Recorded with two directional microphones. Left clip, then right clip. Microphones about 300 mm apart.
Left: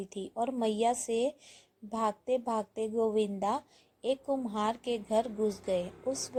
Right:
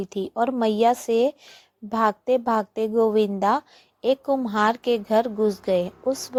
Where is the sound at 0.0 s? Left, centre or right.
Right.